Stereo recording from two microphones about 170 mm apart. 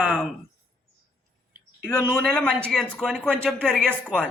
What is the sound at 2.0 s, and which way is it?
A man's voice, 5° left (ahead or behind).